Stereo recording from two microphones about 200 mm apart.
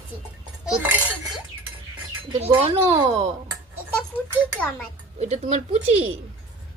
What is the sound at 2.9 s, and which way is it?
Speech, 20° right (ahead or behind).